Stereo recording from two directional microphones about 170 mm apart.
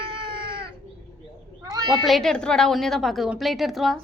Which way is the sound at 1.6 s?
20° right (ahead or behind).